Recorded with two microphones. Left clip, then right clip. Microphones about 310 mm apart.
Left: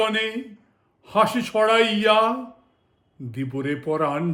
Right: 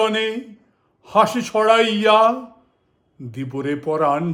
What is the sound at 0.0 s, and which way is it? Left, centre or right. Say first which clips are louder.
A man's voice: right 3 dB; centre.